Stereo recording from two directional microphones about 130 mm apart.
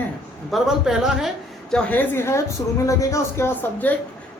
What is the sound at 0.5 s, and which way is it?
Speech, 5° right (ahead or behind).